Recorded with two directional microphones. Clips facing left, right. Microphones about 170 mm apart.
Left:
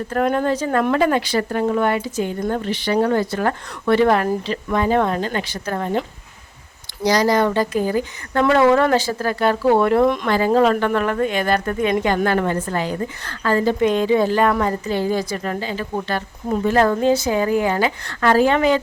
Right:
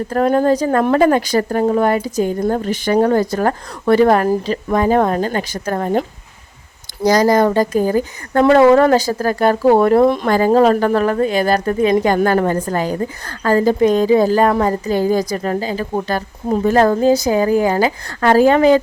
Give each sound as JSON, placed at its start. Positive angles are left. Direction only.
{"t": 0.1, "sound": "a woman's voice", "side_deg": -35}